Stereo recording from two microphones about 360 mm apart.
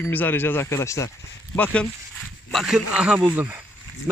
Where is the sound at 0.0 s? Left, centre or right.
Centre.